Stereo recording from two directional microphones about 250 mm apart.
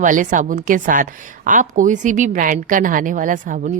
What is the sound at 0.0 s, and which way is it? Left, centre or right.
A woman's voice, right.